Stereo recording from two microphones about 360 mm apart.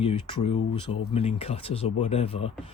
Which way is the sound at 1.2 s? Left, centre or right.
Centre.